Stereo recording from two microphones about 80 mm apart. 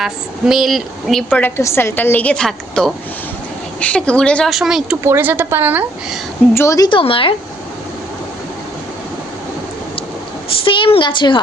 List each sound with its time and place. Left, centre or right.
0.0 s a woman's voice: centre
1.3 s a woman's voice: left
4.4 s a woman's voice: centre
5.0 s a woman's voice: right
6.5 s a woman's voice: left
6.9 s speech: left
10.7 s a woman's voice: left